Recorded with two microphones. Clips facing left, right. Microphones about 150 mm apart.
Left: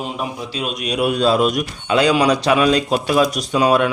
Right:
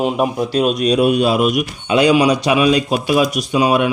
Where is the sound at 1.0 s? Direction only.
15° right (ahead or behind).